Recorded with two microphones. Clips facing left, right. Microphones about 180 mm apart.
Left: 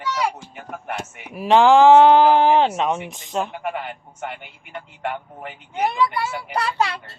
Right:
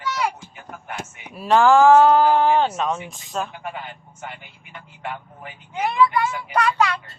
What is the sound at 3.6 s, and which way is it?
A man's voice, 65° left (ahead or behind).